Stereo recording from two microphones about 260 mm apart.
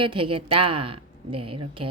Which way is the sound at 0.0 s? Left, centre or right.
Centre.